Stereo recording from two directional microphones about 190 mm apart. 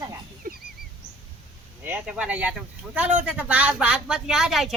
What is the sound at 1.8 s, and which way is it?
Speech, 5° right (ahead or behind).